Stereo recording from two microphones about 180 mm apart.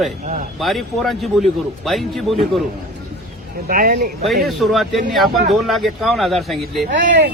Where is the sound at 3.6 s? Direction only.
50° right (ahead or behind).